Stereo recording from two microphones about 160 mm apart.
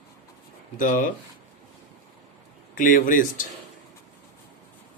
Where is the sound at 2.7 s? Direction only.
55° left (ahead or behind).